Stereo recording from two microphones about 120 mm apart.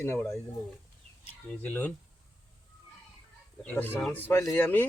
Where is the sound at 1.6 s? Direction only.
15° left (ahead or behind).